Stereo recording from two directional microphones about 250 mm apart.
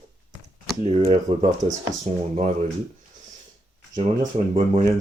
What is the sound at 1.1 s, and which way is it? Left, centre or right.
Speech, centre.